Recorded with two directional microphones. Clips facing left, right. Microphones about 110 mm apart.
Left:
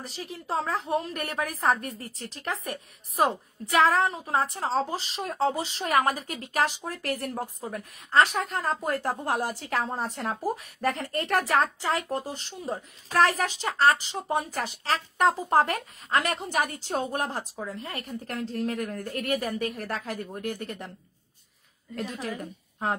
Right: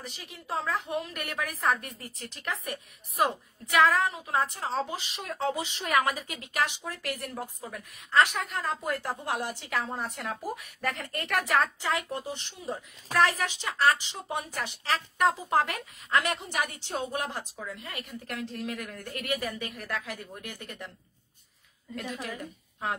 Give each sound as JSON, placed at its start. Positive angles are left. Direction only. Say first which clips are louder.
{"t": 0.0, "sound": "a woman's voice", "louder": "left 6 dB", "side_deg": 35}
{"t": 21.9, "sound": "a woman's voice", "louder": "left 3 dB", "side_deg": 35}